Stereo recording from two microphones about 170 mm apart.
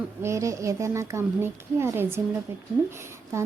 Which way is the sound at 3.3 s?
15° right (ahead or behind).